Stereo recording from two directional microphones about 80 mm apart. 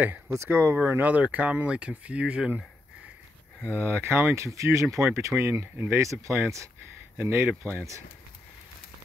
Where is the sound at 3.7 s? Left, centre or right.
Right.